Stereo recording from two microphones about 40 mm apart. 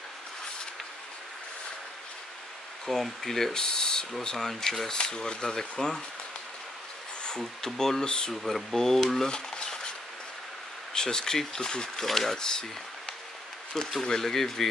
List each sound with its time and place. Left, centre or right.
2.9 s speech: centre
3.5 s speech: centre
7.2 s speech: centre
8.3 s speech: centre
10.9 s speech: centre
12.0 s speech: centre
12.4 s speech: centre
13.7 s speech: centre